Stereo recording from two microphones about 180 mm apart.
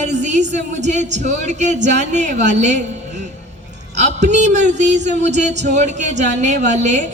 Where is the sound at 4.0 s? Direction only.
40° right (ahead or behind).